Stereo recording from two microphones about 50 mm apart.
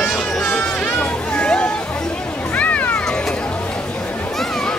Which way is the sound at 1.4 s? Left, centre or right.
Left.